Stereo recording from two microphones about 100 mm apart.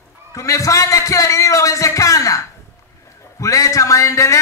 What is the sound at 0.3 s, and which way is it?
A man's voice, 30° left (ahead or behind).